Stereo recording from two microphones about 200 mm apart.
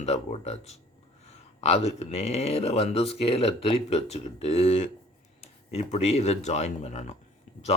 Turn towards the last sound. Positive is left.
turn(degrees=35)  # may be behind; listen again after turning